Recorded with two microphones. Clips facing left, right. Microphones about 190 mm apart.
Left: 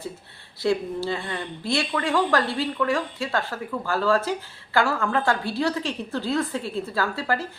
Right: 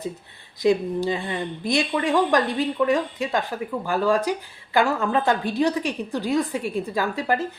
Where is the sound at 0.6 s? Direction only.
15° right (ahead or behind).